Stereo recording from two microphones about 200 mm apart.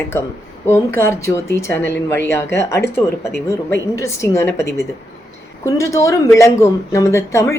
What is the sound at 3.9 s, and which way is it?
Speech, 15° left (ahead or behind).